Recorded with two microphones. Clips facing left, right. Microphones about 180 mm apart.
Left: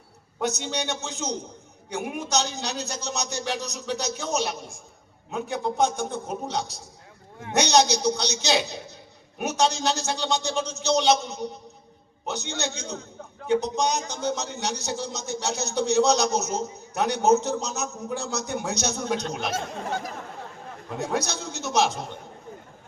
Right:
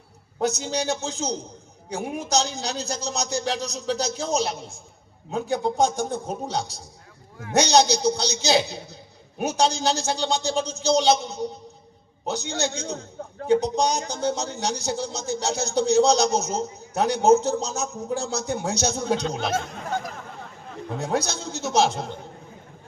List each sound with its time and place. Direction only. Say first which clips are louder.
0.3 s speech: right 3 dB; 30° right (ahead or behind)
21.1 s a man's voice: right 3 dB; 30° right (ahead or behind)